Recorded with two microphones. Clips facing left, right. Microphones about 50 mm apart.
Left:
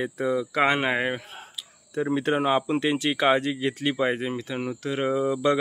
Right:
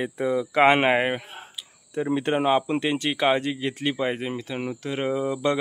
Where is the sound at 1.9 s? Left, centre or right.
Centre.